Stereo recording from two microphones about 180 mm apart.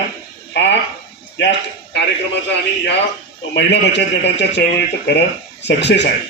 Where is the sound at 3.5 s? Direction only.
70° left (ahead or behind).